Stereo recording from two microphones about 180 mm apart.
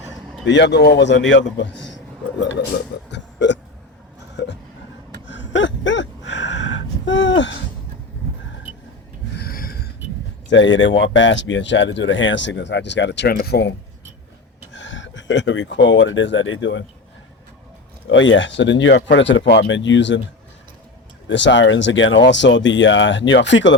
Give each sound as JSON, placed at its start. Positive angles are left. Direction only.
{"t": 0.4, "sound": "a man's voice", "side_deg": 80}
{"t": 3.1, "sound": "burping", "side_deg": 80}
{"t": 5.2, "sound": "gasp", "side_deg": 90}
{"t": 7.0, "sound": "a sound", "side_deg": 90}
{"t": 9.3, "sound": "a sound", "side_deg": 60}
{"t": 10.5, "sound": "speech", "side_deg": 90}
{"t": 14.7, "sound": "speech", "side_deg": 90}
{"t": 18.1, "sound": "speech", "side_deg": 90}
{"t": 21.2, "sound": "speech", "side_deg": 85}